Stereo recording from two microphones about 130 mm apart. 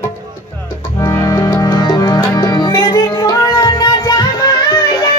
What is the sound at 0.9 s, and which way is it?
Music, 25° left (ahead or behind).